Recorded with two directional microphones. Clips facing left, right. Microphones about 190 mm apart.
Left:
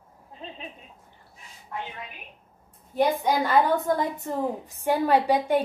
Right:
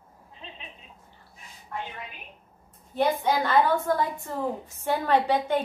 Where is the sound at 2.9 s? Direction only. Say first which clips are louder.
Left 1 dB; 15° left (ahead or behind).